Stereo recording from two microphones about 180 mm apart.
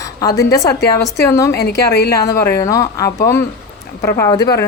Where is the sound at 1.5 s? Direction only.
65° left (ahead or behind).